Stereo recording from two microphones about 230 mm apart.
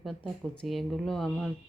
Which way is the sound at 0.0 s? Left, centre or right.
Centre.